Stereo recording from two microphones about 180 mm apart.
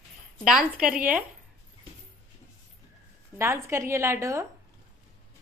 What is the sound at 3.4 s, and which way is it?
A woman's voice, 15° right (ahead or behind).